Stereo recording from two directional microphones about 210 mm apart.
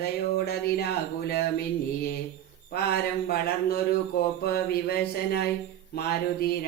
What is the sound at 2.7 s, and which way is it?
Speech, 50° left (ahead or behind).